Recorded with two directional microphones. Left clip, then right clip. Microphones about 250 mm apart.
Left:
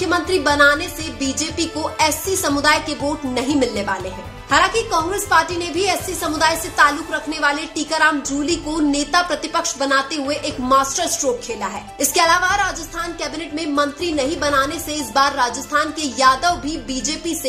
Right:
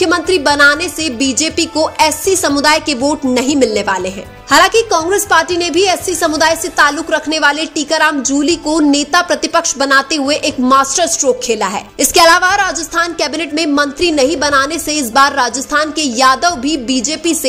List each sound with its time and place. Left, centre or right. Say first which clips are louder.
0.0 s a woman's voice: right 6 dB; right